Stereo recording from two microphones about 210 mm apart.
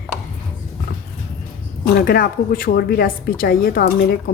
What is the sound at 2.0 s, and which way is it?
A woman's voice, 45° left (ahead or behind).